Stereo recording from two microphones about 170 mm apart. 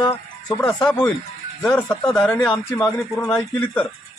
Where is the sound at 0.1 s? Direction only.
10° left (ahead or behind).